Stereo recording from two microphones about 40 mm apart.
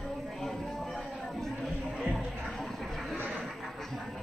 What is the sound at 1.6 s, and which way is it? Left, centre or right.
Music, centre.